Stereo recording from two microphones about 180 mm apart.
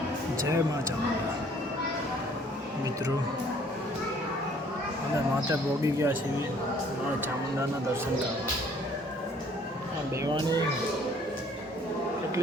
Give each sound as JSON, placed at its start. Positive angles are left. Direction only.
{"t": 0.4, "sound": "speech", "side_deg": -15}
{"t": 5.5, "sound": "speech", "side_deg": -15}
{"t": 10.2, "sound": "speech", "side_deg": -20}